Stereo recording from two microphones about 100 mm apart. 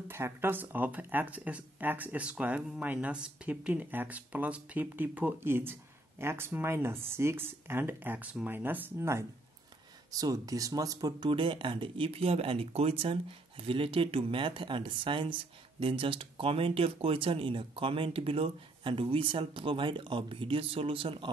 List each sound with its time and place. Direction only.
0.1 s speech: 25° right (ahead or behind)
10.1 s speech: 35° right (ahead or behind); by 21.3 s 60° right (ahead or behind)